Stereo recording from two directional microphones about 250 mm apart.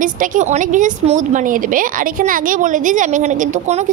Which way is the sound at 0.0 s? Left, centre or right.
Right.